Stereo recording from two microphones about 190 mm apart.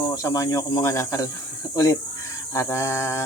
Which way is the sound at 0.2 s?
15° left (ahead or behind).